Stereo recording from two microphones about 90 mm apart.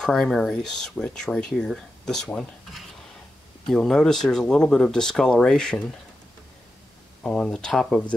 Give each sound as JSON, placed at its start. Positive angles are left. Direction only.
{"t": 0.0, "sound": "speech", "side_deg": 5}
{"t": 7.2, "sound": "speech", "side_deg": 5}